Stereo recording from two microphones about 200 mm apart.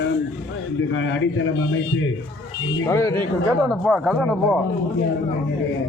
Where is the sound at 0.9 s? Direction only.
70° left (ahead or behind).